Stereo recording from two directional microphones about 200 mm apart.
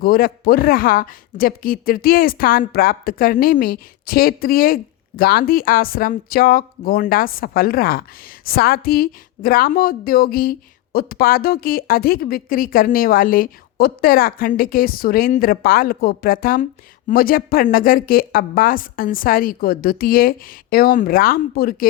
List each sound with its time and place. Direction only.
0.0 s speech: 50° left (ahead or behind)